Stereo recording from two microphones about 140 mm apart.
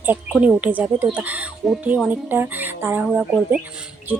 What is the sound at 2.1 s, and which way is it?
Speech, 15° right (ahead or behind).